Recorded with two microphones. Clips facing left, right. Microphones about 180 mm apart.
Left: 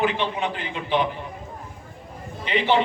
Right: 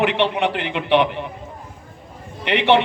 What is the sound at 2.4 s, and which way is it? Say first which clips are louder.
Speech: right 5 dB; 70° right (ahead or behind).